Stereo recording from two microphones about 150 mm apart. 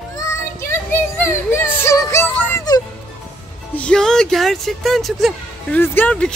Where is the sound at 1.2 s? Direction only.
15° left (ahead or behind).